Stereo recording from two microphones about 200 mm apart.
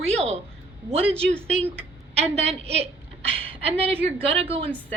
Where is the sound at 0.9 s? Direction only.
30° right (ahead or behind).